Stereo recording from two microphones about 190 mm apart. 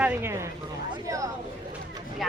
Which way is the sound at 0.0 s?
10° right (ahead or behind).